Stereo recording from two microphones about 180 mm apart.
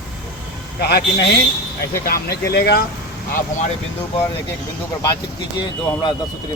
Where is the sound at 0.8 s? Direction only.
65° left (ahead or behind).